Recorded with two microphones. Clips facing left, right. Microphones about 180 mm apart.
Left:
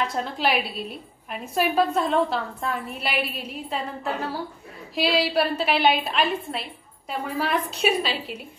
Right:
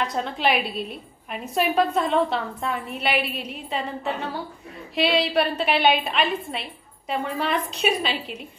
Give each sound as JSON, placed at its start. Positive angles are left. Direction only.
{"t": 0.0, "sound": "a woman's voice", "side_deg": 0}